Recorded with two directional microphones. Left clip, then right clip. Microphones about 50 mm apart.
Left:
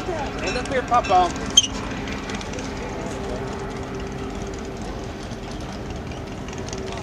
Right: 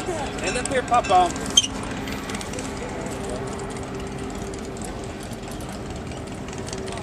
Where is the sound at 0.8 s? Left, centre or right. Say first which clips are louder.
Even; centre.